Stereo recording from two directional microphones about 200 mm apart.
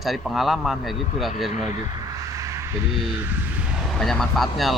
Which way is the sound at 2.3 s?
15° right (ahead or behind).